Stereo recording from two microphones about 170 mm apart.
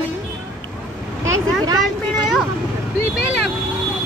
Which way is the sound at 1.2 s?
15° right (ahead or behind).